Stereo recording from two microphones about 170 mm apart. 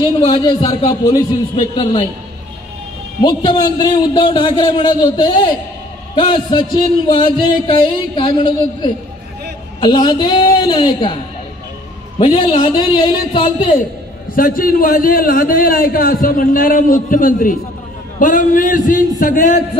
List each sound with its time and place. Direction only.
0.0 s a man's voice: 25° left (ahead or behind)
3.2 s a man's voice: 25° left (ahead or behind)
12.2 s a man's voice: 30° left (ahead or behind)
14.3 s a man's voice: 55° left (ahead or behind)